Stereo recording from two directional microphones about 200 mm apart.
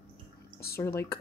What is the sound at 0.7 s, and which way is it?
Speech, 15° left (ahead or behind).